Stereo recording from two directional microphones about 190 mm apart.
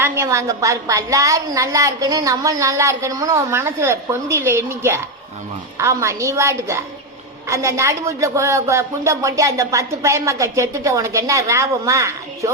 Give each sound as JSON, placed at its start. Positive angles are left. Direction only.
{"t": 0.0, "sound": "speech", "side_deg": -15}